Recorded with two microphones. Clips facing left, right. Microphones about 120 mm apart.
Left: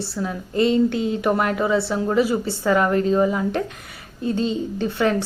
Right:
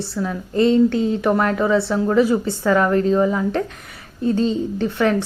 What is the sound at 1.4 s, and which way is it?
A woman's voice, 20° left (ahead or behind).